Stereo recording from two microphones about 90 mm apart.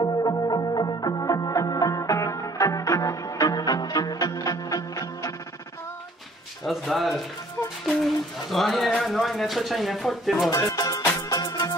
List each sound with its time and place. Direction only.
0.0 s music: 45° left (ahead or behind)
6.6 s speech: centre (ahead or behind)
10.5 s music: 45° left (ahead or behind)